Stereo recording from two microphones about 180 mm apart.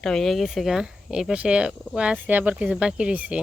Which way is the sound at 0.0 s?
Centre (ahead or behind).